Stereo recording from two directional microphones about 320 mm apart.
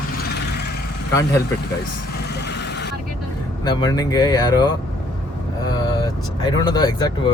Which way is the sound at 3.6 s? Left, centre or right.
Centre.